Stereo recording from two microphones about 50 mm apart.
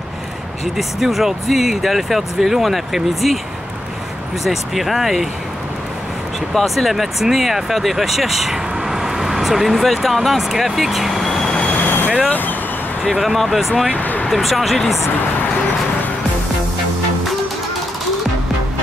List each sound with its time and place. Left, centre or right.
0.7 s speech: centre
4.5 s speech: centre
6.5 s speech: centre
11.7 s vehicle: left
12.3 s speech: left
13.1 s speech: centre
13.9 s a sound: left
14.3 s speech: centre